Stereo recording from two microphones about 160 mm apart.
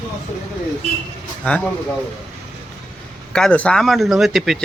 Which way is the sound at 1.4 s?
5° left (ahead or behind).